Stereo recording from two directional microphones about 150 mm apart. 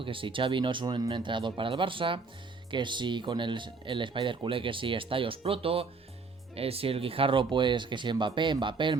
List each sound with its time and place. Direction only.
0.0 s speech: 35° right (ahead or behind)